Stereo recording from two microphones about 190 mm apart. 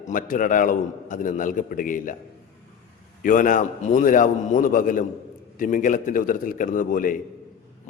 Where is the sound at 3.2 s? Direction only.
45° left (ahead or behind).